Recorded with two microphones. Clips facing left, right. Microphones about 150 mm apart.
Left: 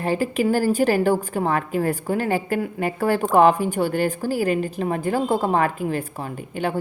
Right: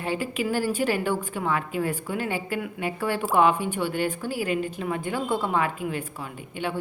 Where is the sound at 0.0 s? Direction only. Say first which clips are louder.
Left 6 dB; 40° left (ahead or behind).